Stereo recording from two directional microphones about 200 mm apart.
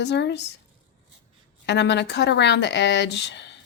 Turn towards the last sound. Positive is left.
turn(degrees=60)  # may be behind; listen again after turning